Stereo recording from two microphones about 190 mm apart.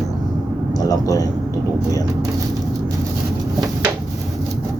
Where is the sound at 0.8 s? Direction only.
20° left (ahead or behind).